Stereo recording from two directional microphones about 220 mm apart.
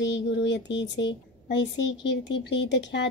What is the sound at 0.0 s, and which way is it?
Speech, 50° left (ahead or behind).